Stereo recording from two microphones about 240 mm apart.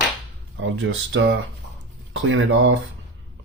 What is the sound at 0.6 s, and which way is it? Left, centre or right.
Speech, right.